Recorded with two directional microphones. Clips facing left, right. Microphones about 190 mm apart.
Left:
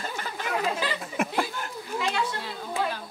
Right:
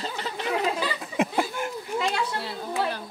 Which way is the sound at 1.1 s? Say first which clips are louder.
Right 4 dB; 15° right (ahead or behind).